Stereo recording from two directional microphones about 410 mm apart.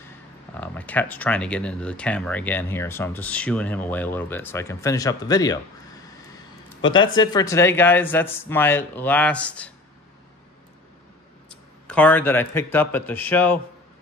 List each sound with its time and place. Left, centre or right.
0.6 s speech: centre
6.8 s speech: centre
11.9 s speech: centre